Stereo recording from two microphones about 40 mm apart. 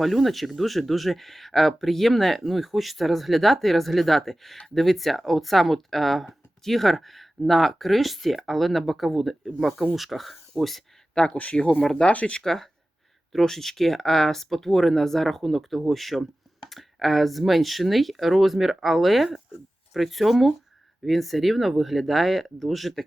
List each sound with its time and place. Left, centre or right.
0.0 s speech: centre
11.2 s speech: centre
11.8 s speech: centre
12.0 s speech: left
12.4 s speech: centre